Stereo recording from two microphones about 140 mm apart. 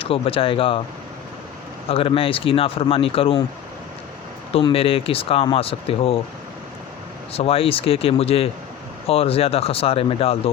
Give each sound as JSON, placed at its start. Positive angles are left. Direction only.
{"t": 0.0, "sound": "speech", "side_deg": 40}
{"t": 1.9, "sound": "speech", "side_deg": 40}
{"t": 4.5, "sound": "speech", "side_deg": 45}
{"t": 7.3, "sound": "speech", "side_deg": 45}